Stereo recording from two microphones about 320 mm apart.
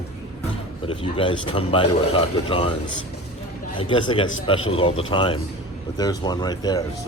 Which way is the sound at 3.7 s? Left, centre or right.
Centre.